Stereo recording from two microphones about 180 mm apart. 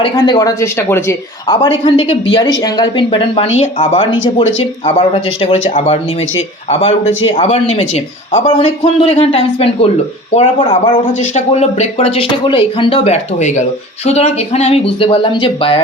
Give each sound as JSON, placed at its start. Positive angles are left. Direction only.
{"t": 0.0, "sound": "speech", "side_deg": 25}
{"t": 1.5, "sound": "speech", "side_deg": 30}